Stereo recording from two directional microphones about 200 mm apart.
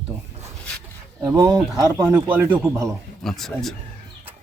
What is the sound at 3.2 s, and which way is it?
Speech, centre (ahead or behind).